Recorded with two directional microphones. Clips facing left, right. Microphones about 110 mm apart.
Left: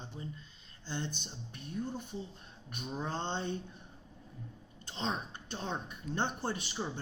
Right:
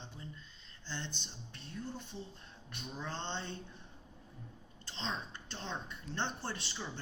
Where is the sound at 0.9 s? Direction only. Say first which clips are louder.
Left 5 dB; 15° left (ahead or behind).